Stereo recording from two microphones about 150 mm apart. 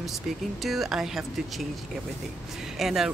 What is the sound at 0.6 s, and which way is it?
Speech, centre (ahead or behind).